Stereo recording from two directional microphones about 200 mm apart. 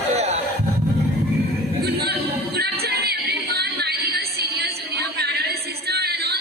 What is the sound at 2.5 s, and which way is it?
Music, 50° right (ahead or behind).